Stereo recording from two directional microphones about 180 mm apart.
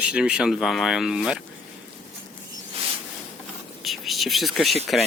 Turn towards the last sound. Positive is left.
turn(degrees=0)  # may be behind; listen again after turning